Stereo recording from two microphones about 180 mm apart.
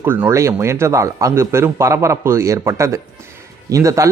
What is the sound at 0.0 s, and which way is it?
Speech, 10° right (ahead or behind).